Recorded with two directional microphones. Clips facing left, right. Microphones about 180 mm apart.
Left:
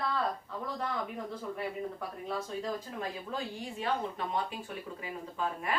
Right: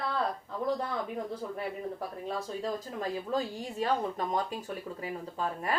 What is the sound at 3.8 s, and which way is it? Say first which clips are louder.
A woman's voice: right 4 dB; 40° right (ahead or behind).